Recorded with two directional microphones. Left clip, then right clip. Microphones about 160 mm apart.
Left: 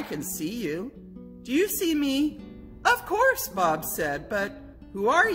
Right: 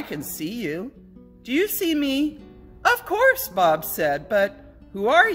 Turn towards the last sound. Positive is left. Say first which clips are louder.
# right 4 dB
turn(degrees=-50)  # may be behind; listen again after turning